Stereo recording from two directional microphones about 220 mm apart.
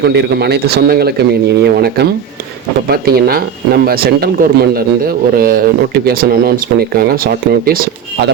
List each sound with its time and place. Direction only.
0.0 s speech: 50° right (ahead or behind)